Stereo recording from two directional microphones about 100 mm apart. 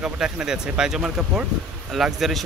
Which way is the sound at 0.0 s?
5° right (ahead or behind).